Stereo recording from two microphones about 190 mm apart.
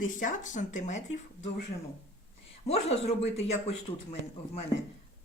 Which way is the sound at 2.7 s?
35° left (ahead or behind).